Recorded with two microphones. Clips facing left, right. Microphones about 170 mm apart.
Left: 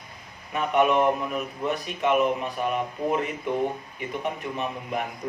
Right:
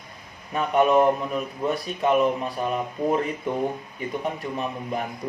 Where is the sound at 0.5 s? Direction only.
35° right (ahead or behind).